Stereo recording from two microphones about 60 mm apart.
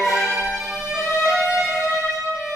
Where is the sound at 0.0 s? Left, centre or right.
Centre.